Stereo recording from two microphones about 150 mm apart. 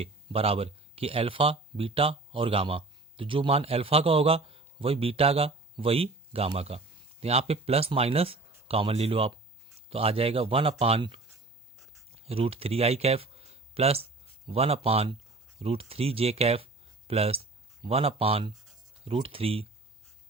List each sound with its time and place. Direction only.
0.0 s speech: 40° right (ahead or behind)